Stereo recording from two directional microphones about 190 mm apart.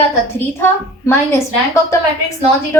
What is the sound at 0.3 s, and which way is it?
A woman's voice, 10° left (ahead or behind).